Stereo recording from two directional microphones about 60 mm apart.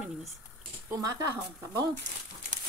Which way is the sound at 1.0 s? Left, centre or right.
Right.